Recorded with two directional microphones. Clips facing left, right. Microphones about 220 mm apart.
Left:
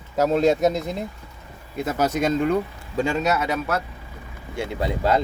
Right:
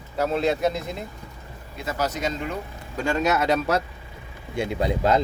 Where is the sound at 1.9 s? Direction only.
55° left (ahead or behind).